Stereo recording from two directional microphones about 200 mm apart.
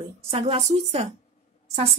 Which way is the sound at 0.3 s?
30° right (ahead or behind).